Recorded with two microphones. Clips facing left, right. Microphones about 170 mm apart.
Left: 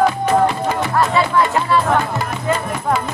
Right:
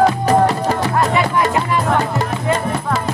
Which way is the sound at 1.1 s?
15° right (ahead or behind).